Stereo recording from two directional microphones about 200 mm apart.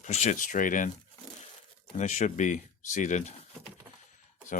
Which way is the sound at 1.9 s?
35° left (ahead or behind).